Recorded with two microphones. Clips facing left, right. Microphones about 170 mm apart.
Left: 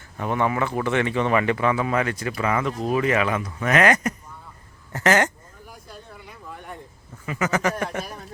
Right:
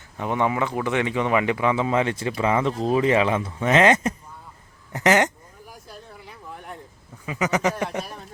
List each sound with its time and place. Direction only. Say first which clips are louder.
0.2 s speech: even; 15° right (ahead or behind)
4.9 s a sound: right 1 dB; 15° right (ahead or behind)
7.3 s speech: right 1 dB; 15° right (ahead or behind)